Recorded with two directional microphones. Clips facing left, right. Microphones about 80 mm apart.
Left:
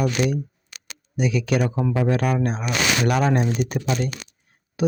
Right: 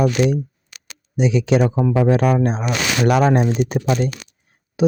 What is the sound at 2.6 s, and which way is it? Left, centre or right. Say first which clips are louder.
Speech: right 2 dB; right.